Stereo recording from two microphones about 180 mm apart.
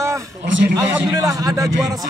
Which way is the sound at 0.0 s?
15° right (ahead or behind).